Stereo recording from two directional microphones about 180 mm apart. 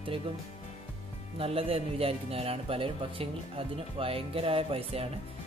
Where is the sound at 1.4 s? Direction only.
30° right (ahead or behind).